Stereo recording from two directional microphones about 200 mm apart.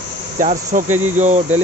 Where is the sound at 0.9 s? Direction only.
90° right.